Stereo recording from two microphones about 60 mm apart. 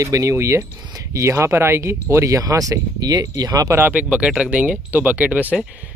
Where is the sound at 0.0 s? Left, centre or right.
Right.